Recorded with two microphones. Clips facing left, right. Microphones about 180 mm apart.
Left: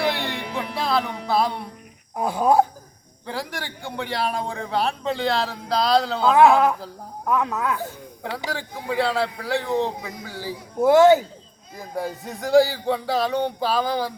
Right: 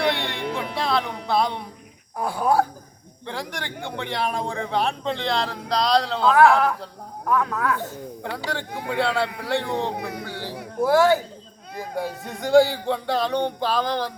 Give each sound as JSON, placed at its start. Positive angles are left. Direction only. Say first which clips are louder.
{"t": 0.0, "sound": "music", "louder": "right 1 dB", "side_deg": 0}
{"t": 2.1, "sound": "speech", "louder": "left 3 dB", "side_deg": 20}
{"t": 3.2, "sound": "speech", "louder": "left 1 dB", "side_deg": 0}
{"t": 6.3, "sound": "speech", "louder": "left 2 dB", "side_deg": 20}
{"t": 8.9, "sound": "speech", "louder": "left 1 dB", "side_deg": 0}
{"t": 9.9, "sound": "speech", "louder": "right 4 dB", "side_deg": -65}
{"t": 10.8, "sound": "speech", "louder": "left 4 dB", "side_deg": 20}
{"t": 11.8, "sound": "speech", "louder": "even", "side_deg": 0}